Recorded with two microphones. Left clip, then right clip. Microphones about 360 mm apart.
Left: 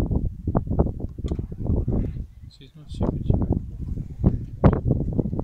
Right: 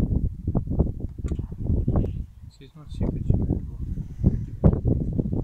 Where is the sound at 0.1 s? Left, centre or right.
Left.